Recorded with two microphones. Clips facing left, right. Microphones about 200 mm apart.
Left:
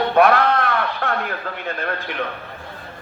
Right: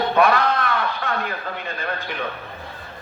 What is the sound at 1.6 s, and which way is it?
Speech, 60° left (ahead or behind).